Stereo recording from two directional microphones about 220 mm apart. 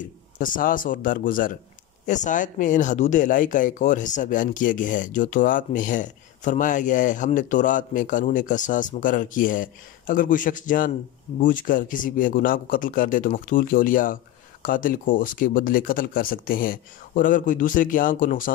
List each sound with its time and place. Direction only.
0.0 s a man's voice: 40° left (ahead or behind)